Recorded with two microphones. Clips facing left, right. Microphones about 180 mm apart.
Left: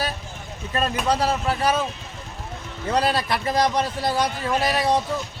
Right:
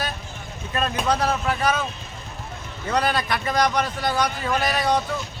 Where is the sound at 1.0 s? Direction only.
35° left (ahead or behind).